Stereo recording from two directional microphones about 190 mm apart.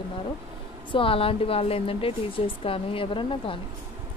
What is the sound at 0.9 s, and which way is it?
Speech, 30° left (ahead or behind).